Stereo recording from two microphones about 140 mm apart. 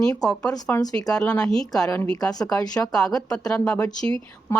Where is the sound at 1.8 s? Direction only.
20° left (ahead or behind).